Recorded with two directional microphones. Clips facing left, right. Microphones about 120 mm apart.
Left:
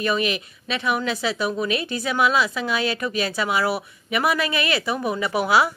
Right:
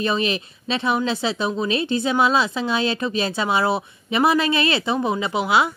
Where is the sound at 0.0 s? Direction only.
30° right (ahead or behind).